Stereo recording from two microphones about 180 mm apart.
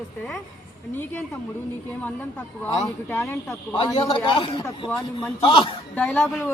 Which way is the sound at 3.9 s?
30° left (ahead or behind).